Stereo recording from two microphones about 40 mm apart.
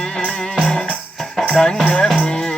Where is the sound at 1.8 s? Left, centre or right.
Centre.